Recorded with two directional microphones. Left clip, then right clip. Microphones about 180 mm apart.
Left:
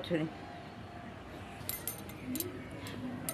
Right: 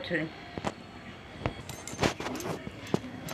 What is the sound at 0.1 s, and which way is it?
Speech, 15° left (ahead or behind).